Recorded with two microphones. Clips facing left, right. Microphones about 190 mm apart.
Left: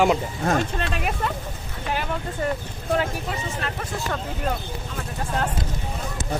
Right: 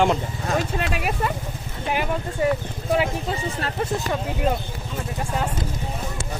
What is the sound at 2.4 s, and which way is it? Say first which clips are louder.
Speech: right 5 dB; 10° right (ahead or behind).